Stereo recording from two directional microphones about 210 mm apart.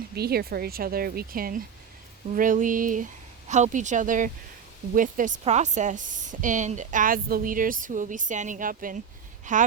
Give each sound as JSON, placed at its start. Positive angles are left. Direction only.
{"t": 0.2, "sound": "speech", "side_deg": -50}